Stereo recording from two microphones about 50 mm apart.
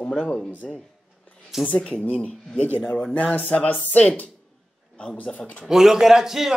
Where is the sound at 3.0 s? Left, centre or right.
Left.